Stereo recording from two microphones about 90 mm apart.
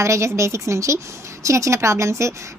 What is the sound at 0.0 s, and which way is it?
A woman's voice, 35° right (ahead or behind).